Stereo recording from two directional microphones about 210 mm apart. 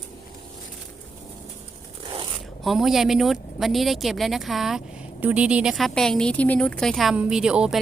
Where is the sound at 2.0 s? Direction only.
25° right (ahead or behind).